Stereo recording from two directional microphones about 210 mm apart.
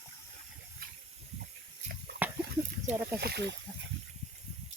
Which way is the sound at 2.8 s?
10° right (ahead or behind).